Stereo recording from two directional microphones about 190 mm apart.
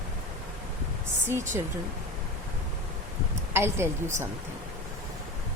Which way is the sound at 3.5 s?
15° right (ahead or behind).